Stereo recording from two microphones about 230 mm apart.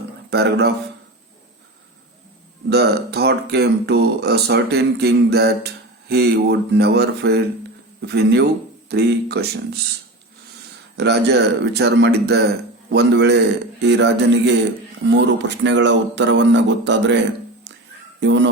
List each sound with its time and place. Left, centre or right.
0.3 s speech: right
2.6 s speech: right
10.9 s speech: right
18.2 s speech: right